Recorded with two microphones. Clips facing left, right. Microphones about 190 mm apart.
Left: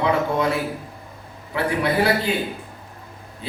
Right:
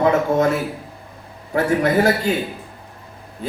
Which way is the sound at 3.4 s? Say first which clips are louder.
Right 6 dB; 45° right (ahead or behind).